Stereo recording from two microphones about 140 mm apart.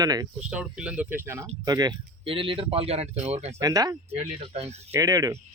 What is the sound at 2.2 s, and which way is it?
Speech, 40° right (ahead or behind).